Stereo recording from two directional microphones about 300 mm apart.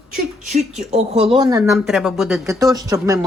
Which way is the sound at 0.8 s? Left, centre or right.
Right.